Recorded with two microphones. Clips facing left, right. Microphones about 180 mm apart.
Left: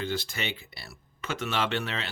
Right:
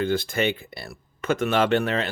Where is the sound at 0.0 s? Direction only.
55° right (ahead or behind).